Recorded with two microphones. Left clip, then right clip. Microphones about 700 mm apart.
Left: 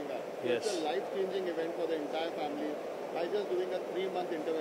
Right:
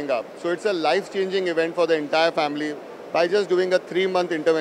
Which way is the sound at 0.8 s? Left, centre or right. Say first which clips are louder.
Right 12 dB; right.